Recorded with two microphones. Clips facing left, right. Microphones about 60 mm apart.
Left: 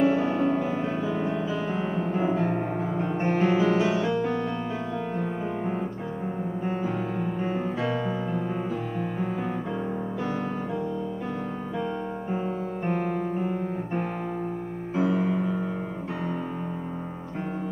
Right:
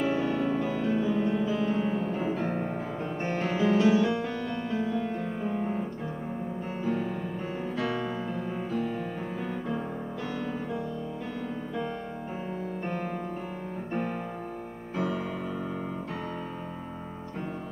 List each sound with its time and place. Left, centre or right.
0.0 s music: centre
1.8 s music: left
2.4 s music: centre
7.8 s music: centre
12.8 s music: centre
15.0 s music: left